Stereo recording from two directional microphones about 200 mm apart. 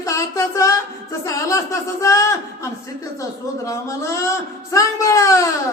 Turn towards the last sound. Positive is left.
turn(degrees=15)  # may be behind; listen again after turning